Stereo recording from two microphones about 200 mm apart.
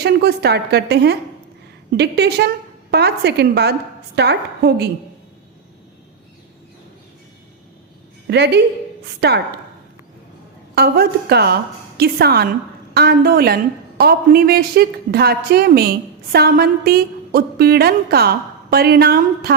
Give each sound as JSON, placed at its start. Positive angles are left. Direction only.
{"t": 0.0, "sound": "a woman's voice", "side_deg": -50}
{"t": 8.3, "sound": "a woman's voice", "side_deg": -55}
{"t": 10.8, "sound": "a woman's voice", "side_deg": -50}